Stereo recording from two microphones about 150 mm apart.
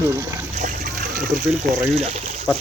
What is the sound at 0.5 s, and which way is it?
Splash, 65° right (ahead or behind).